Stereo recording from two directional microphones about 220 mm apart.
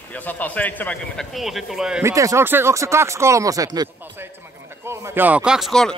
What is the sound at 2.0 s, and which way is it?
Speech, 15° right (ahead or behind).